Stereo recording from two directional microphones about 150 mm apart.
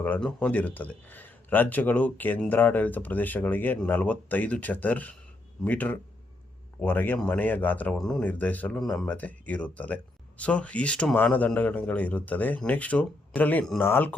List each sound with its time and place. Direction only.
0.0 s speech: 10° left (ahead or behind)